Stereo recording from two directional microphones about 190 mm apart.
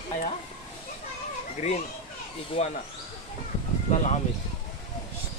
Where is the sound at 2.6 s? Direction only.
35° left (ahead or behind).